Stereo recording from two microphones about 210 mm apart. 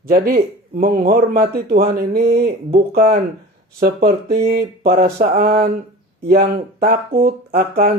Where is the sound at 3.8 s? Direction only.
50° right (ahead or behind).